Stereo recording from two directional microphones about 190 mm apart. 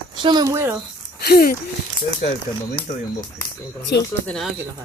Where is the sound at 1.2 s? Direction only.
50° left (ahead or behind).